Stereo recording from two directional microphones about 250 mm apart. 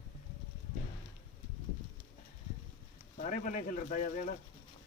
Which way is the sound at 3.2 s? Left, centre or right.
Left.